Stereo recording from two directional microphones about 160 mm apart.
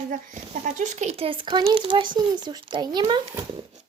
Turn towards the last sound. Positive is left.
turn(degrees=-25)  # may be behind; listen again after turning